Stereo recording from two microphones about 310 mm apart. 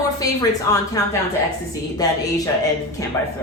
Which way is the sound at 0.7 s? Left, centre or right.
Centre.